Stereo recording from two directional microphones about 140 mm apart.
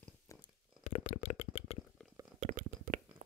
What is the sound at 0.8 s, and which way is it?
Shuffling cards, 55° left (ahead or behind).